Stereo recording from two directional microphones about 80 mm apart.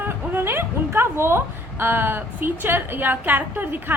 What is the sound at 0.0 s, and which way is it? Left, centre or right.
A woman's voice, right.